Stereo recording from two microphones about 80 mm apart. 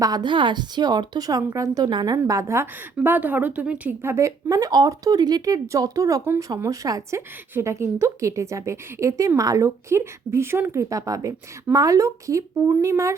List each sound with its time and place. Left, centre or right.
0.0 s speech: right
0.3 s speech: right
1.9 s speech: right
2.1 s a woman's voice: right
3.0 s a woman's voice: right
3.8 s a woman's voice: right
4.7 s speech: right
7.5 s a woman's voice: right